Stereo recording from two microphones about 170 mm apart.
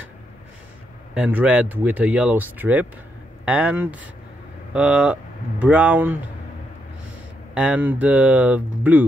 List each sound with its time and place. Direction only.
1.1 s speech: 5° right (ahead or behind)
7.5 s speech: 5° right (ahead or behind)